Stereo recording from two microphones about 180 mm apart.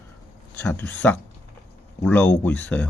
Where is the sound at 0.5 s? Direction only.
10° left (ahead or behind).